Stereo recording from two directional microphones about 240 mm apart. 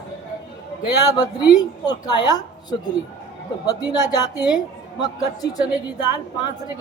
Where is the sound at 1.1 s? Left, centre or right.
Centre.